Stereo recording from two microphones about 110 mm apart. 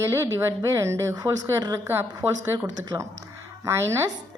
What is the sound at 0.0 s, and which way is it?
Speech, 25° right (ahead or behind).